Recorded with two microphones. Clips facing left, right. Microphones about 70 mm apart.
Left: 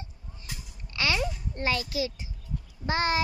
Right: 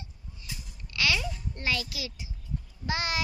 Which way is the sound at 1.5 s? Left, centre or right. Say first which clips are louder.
Left 4 dB; left.